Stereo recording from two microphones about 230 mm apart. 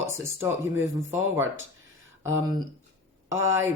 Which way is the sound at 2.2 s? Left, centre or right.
Centre.